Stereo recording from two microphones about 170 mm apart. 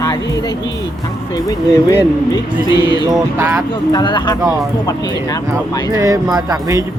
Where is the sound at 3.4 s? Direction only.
10° right (ahead or behind).